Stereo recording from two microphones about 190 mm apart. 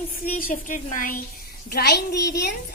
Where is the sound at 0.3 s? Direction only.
40° left (ahead or behind).